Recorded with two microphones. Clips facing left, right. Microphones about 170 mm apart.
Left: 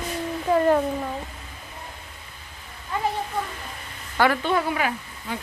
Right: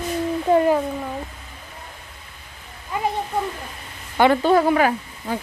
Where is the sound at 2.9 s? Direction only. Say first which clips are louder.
Right 2 dB; 15° right (ahead or behind).